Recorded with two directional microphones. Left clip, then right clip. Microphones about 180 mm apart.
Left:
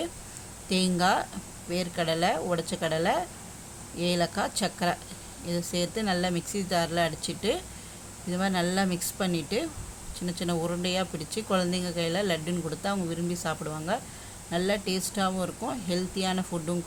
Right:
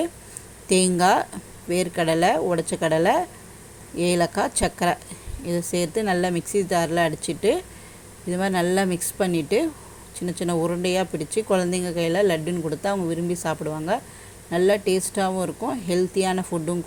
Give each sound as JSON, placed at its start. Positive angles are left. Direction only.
{"t": 0.7, "sound": "speech", "side_deg": -25}